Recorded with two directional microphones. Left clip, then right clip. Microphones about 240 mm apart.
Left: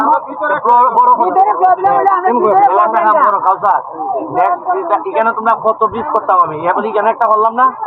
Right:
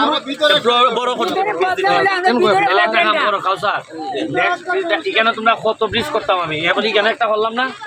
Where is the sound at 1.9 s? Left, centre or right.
Centre.